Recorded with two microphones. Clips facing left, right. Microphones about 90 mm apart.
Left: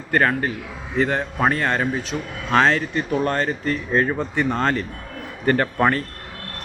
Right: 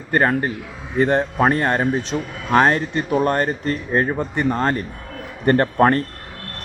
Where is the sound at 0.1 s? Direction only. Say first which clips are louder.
Right 2 dB; 25° right (ahead or behind).